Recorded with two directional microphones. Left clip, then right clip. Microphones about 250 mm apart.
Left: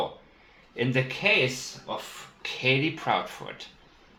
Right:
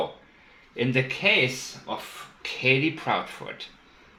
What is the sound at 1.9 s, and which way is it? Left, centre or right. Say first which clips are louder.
Speech: right 1 dB; centre.